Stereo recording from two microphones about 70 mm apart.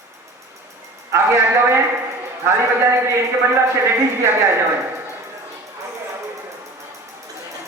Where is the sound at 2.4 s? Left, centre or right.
Right.